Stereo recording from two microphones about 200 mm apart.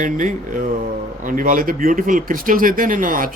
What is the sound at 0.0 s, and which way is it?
Speech, 40° right (ahead or behind).